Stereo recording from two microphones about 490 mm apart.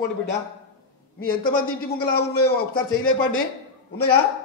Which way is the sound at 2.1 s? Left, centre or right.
Centre.